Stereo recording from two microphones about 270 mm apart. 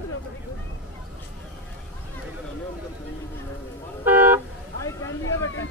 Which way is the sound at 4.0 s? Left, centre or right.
Centre.